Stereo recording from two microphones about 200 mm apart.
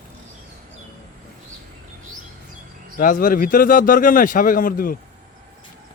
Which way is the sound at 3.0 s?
45° left (ahead or behind).